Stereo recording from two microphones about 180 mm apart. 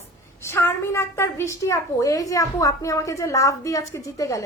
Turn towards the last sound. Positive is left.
turn(degrees=15)  # may be behind; listen again after turning